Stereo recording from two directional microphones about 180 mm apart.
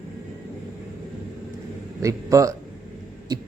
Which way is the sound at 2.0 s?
15° right (ahead or behind).